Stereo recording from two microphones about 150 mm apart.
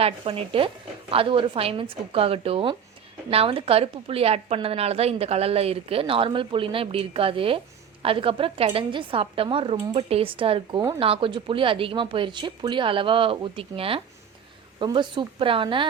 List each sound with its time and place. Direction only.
0.0 s a woman's voice: 40° right (ahead or behind)